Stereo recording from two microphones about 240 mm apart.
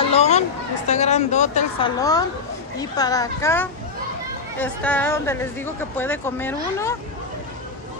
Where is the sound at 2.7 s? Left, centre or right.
Centre.